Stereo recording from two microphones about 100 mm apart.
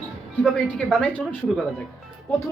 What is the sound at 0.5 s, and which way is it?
Speech, 10° left (ahead or behind).